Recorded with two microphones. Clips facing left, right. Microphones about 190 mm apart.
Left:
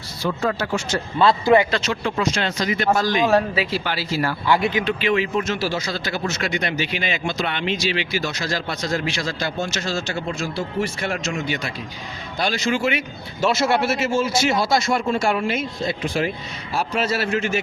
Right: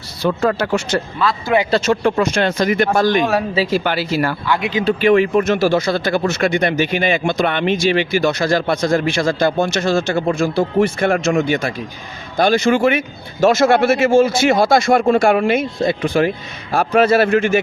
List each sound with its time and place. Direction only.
0.2 s speech: 65° right (ahead or behind)
1.7 s speech: 50° right (ahead or behind)
4.9 s speech: 50° right (ahead or behind)